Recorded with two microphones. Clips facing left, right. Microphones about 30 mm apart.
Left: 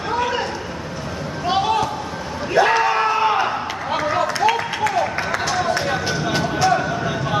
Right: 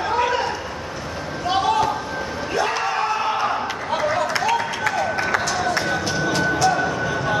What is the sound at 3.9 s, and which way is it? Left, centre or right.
Run, centre.